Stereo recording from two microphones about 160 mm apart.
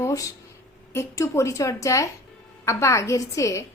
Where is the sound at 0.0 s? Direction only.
20° left (ahead or behind).